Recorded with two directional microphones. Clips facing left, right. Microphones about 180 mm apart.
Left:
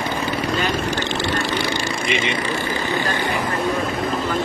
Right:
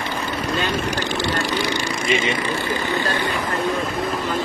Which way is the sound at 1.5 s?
15° right (ahead or behind).